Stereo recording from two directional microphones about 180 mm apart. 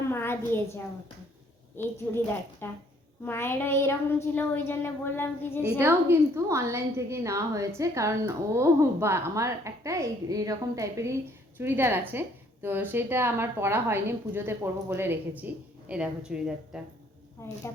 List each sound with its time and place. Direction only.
0.0 s a sound: 15° left (ahead or behind)
1.7 s a child's voice: 15° left (ahead or behind)
5.8 s a woman's voice: 15° right (ahead or behind)